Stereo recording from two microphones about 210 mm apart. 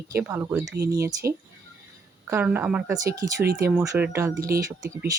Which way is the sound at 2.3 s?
10° right (ahead or behind).